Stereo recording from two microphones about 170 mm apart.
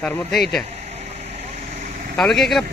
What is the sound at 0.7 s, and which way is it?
Vehicle, 40° right (ahead or behind).